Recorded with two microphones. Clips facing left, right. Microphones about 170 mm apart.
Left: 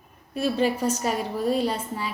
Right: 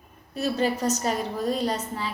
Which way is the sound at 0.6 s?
10° left (ahead or behind).